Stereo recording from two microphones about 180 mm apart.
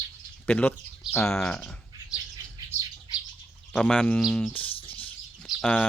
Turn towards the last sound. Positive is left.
turn(degrees=5)  # may be behind; listen again after turning